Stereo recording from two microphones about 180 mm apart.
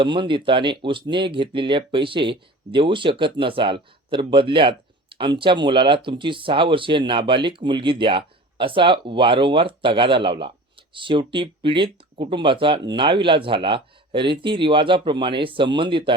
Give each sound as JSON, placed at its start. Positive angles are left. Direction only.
{"t": 0.0, "sound": "speech", "side_deg": -25}